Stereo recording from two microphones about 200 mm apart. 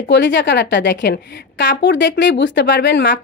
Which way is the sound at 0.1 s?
65° left (ahead or behind).